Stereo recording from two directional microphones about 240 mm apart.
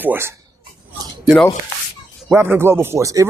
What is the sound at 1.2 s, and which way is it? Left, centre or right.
Speech, centre.